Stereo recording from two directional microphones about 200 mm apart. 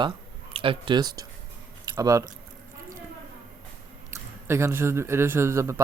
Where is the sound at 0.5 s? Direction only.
25° right (ahead or behind).